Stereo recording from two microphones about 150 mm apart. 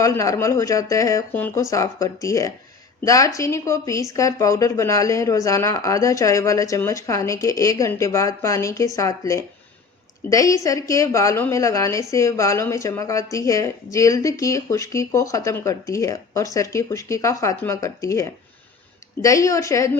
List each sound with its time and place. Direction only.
0.0 s speech: 20° left (ahead or behind)